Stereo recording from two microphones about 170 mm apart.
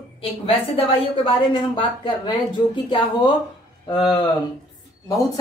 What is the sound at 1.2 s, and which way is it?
Speech, 30° left (ahead or behind).